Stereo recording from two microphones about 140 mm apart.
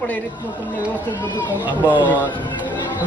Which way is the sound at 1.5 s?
10° right (ahead or behind).